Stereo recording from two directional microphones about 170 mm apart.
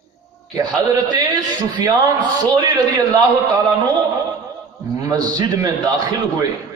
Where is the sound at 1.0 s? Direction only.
25° right (ahead or behind).